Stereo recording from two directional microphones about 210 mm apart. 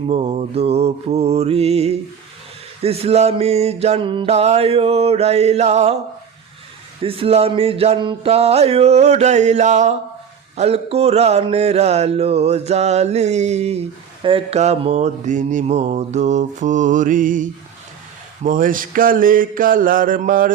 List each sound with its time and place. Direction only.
0.1 s music: 30° right (ahead or behind)
7.0 s music: 25° right (ahead or behind)
10.6 s mantra: 30° right (ahead or behind)